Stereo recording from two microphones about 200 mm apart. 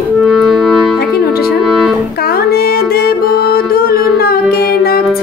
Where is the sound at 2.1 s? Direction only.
50° left (ahead or behind).